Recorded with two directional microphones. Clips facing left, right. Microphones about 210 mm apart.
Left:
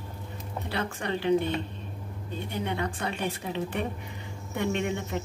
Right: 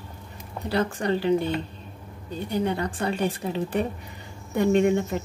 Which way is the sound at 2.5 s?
35° right (ahead or behind).